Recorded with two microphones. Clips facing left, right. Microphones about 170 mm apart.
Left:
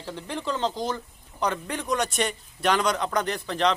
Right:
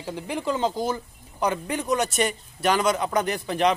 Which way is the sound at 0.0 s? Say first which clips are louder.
Right 3 dB; 10° right (ahead or behind).